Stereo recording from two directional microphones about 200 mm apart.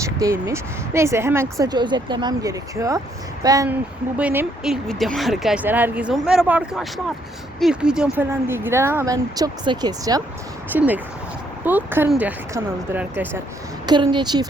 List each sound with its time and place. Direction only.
0.0 s speech: 15° right (ahead or behind)
13.8 s a woman's voice: 20° right (ahead or behind)